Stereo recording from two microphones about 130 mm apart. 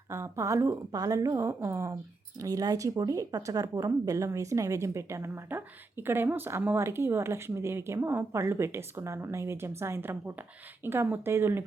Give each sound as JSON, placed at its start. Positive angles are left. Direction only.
{"t": 0.1, "sound": "speech", "side_deg": -20}